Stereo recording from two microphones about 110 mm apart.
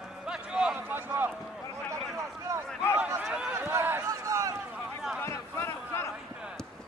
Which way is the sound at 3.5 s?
20° right (ahead or behind).